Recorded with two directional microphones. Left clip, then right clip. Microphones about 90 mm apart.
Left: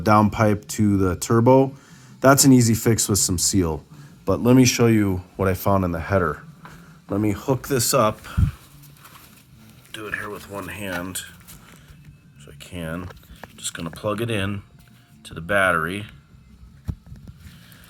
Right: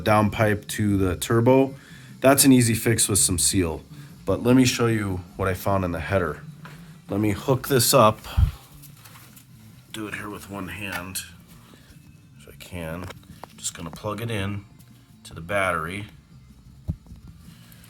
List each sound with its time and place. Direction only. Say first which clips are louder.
0.2 s speech: left 2 dB; 10° right (ahead or behind); by 5.7 s 15° left (ahead or behind)
6.0 s speech: left 2 dB; centre (ahead or behind)
7.1 s speech: left 1 dB; 15° right (ahead or behind)
9.9 s speech: left 3 dB; 25° right (ahead or behind)
10.2 s speech: left 3 dB; 10° right (ahead or behind)
10.8 s speech: left 2 dB; 15° left (ahead or behind)
12.5 s a sound: left 1 dB; 10° right (ahead or behind)
13.6 s a sound: left 3 dB; 20° left (ahead or behind)
13.8 s speech: left 6 dB; 15° left (ahead or behind)